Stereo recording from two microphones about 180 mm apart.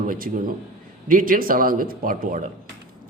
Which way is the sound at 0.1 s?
50° right (ahead or behind).